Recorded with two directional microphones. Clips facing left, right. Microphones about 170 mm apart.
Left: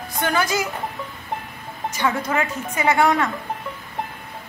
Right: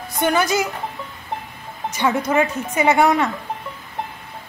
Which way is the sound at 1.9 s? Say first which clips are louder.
Right 4 dB; 20° right (ahead or behind).